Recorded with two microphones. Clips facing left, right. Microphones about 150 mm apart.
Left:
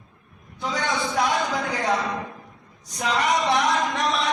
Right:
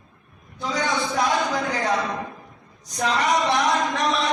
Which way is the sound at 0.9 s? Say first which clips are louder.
Even; centre (ahead or behind).